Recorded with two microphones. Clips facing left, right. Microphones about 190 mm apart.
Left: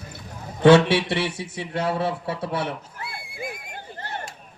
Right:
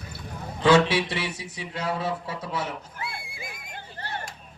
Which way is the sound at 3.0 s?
60° left (ahead or behind).